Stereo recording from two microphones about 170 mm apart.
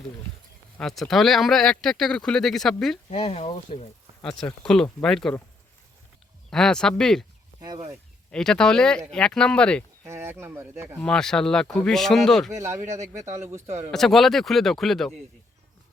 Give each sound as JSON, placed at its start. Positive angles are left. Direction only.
{"t": 0.8, "sound": "speech", "side_deg": 0}
{"t": 3.1, "sound": "speech", "side_deg": 40}
{"t": 4.2, "sound": "speech", "side_deg": 5}
{"t": 6.5, "sound": "speech", "side_deg": 5}
{"t": 7.6, "sound": "speech", "side_deg": -25}
{"t": 8.3, "sound": "speech", "side_deg": 5}
{"t": 10.0, "sound": "speech", "side_deg": -15}
{"t": 11.0, "sound": "speech", "side_deg": 5}
{"t": 12.8, "sound": "a man's voice", "side_deg": -45}
{"t": 13.1, "sound": "speech", "side_deg": -15}
{"t": 13.7, "sound": "speech", "side_deg": -40}
{"t": 13.9, "sound": "speech", "side_deg": 0}